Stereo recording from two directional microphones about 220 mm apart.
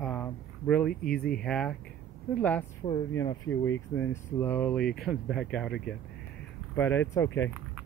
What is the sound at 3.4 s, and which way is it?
Speech, 60° left (ahead or behind).